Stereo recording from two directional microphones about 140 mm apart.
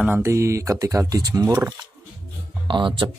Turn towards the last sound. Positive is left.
turn(degrees=-35)  # may be behind; listen again after turning